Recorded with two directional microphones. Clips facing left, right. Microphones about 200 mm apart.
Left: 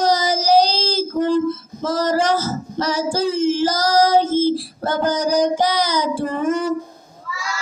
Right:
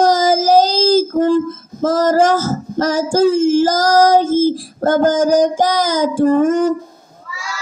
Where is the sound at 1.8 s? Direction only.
45° right (ahead or behind).